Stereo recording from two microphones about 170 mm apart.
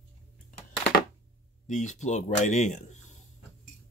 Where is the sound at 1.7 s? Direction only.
45° left (ahead or behind).